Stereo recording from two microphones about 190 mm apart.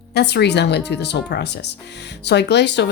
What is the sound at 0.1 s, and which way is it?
Speech, 60° left (ahead or behind).